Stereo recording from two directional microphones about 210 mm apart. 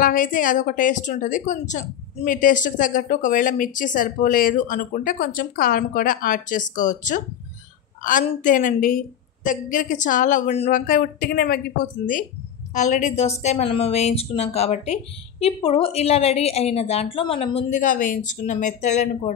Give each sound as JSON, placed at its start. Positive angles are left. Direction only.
{"t": 0.0, "sound": "a woman's voice", "side_deg": 40}
{"t": 10.9, "sound": "speech", "side_deg": 45}